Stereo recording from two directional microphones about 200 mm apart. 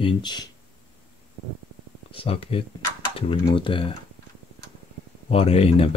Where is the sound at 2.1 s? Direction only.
25° left (ahead or behind).